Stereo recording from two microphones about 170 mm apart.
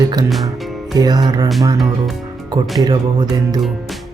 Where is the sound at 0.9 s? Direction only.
25° right (ahead or behind).